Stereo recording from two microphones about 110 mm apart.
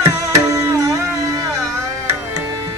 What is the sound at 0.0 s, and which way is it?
Music, 30° right (ahead or behind).